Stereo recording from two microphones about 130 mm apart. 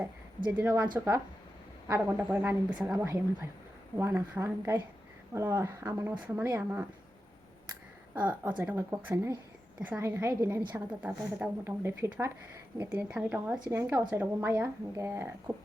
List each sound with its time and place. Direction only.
0.0 s a sound: 15° right (ahead or behind)
0.9 s speech: 15° right (ahead or behind)
3.9 s speech: 20° right (ahead or behind)
8.1 s speech: 10° right (ahead or behind)
13.0 s speech: 10° right (ahead or behind)